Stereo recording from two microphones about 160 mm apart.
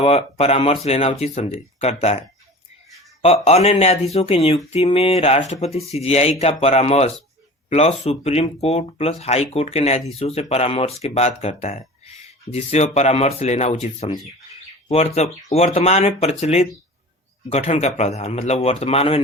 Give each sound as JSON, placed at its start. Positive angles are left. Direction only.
{"t": 0.0, "sound": "speech", "side_deg": 40}